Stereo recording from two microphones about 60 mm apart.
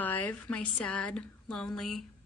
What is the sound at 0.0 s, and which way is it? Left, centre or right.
A woman's voice, left.